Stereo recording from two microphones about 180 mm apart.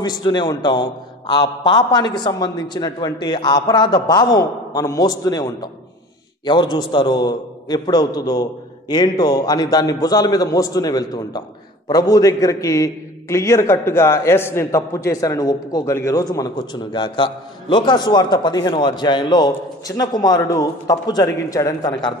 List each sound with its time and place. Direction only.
0.0 s a man's voice: 25° left (ahead or behind)